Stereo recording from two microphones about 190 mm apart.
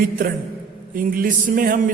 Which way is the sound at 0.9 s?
45° right (ahead or behind).